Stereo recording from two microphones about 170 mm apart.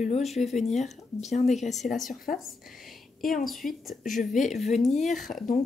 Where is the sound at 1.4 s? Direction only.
Centre (ahead or behind).